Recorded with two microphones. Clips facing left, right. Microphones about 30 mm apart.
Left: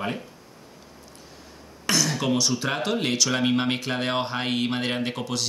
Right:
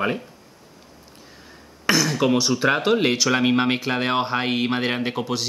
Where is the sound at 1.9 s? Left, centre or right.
Centre.